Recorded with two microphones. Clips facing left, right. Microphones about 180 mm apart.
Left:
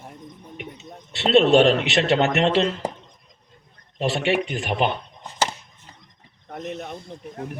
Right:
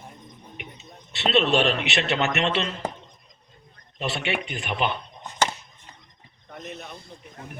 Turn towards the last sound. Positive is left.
turn(degrees=70)  # may be behind; listen again after turning